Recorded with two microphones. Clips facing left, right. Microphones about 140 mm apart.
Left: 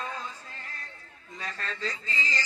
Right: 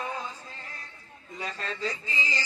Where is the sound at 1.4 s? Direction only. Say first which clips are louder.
Right 2 dB; 15° right (ahead or behind).